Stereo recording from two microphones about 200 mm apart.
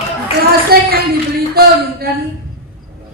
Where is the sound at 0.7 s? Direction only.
50° right (ahead or behind).